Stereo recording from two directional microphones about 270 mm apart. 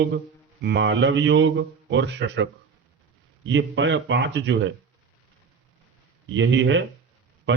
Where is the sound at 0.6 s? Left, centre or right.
Right.